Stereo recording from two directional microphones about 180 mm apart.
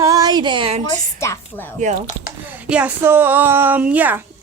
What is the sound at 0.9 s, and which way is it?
Speech, 15° left (ahead or behind).